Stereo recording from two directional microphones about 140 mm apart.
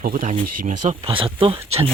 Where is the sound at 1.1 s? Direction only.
40° right (ahead or behind).